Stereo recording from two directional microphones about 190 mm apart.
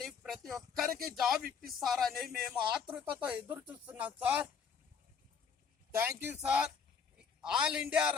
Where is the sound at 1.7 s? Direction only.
Centre (ahead or behind).